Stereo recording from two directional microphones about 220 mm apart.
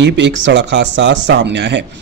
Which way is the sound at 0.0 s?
55° right (ahead or behind).